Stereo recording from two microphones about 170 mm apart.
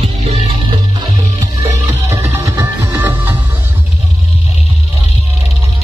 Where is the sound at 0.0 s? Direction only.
40° right (ahead or behind).